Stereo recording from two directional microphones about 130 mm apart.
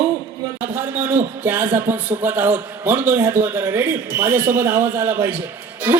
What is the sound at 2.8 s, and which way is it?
A man's voice, 15° right (ahead or behind).